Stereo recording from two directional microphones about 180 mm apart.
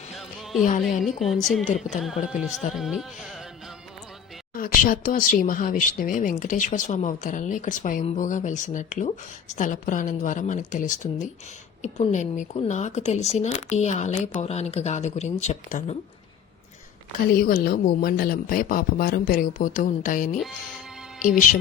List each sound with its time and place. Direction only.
0.1 s music: centre (ahead or behind)
1.0 s a sound: centre (ahead or behind)
1.6 s a woman's voice: 40° left (ahead or behind)
2.0 s a sound: centre (ahead or behind)
4.5 s a woman's voice: 50° left (ahead or behind)
17.3 s speech: 55° left (ahead or behind)